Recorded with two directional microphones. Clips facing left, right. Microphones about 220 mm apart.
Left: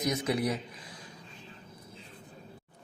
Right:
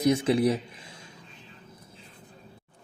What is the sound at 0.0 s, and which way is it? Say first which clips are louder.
Speech: right 7 dB; 30° right (ahead or behind).